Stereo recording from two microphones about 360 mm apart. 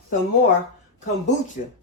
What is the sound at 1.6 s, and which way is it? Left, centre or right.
Speech, left.